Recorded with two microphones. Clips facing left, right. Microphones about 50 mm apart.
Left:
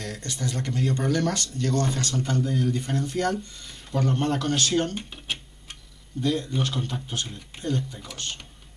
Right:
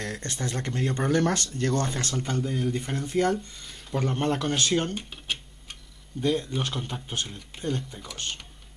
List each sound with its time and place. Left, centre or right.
0.0 s speech: right
4.9 s tick-tock: centre
6.2 s speech: centre
7.2 s speech: centre
7.6 s speech: centre